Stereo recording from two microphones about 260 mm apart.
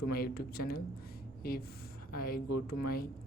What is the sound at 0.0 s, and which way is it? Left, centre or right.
A woman's voice, left.